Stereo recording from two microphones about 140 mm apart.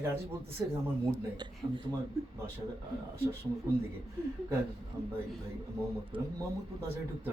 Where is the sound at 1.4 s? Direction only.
35° right (ahead or behind).